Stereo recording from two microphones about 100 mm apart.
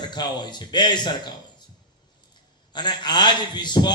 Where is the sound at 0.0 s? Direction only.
45° left (ahead or behind).